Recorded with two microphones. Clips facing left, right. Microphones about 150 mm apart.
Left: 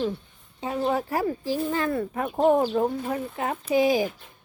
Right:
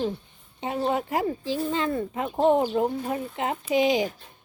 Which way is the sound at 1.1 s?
20° right (ahead or behind).